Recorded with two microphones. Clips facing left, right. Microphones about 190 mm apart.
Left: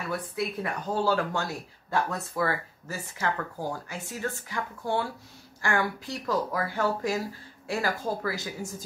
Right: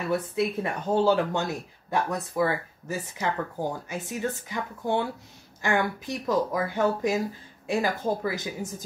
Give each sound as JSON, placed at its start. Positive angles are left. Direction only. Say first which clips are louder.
{"t": 0.1, "sound": "speech", "louder": "right 6 dB", "side_deg": -25}